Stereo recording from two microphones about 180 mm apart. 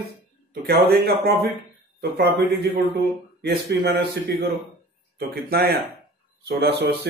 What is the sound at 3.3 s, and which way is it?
A man's voice, 65° right (ahead or behind).